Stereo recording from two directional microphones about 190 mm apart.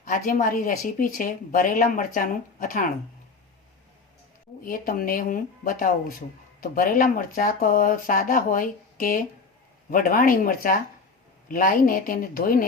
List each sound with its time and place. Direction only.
0.1 s speech: 45° left (ahead or behind)
4.6 s speech: 50° left (ahead or behind)